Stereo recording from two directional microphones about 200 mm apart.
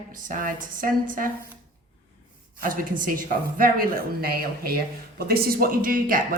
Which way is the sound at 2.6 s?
45° right (ahead or behind).